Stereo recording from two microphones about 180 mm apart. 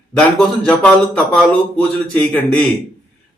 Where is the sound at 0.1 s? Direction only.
5° left (ahead or behind).